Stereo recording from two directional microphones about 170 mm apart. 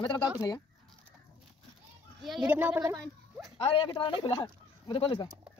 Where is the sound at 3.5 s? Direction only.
35° left (ahead or behind).